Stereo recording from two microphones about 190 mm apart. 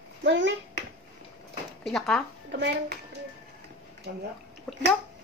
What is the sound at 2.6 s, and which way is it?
Speech, 60° right (ahead or behind).